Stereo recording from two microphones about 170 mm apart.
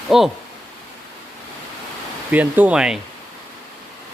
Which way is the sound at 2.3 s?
10° right (ahead or behind).